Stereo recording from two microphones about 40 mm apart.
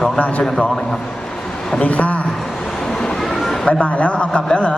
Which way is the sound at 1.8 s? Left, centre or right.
Left.